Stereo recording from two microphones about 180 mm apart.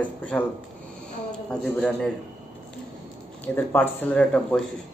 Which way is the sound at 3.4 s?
10° left (ahead or behind).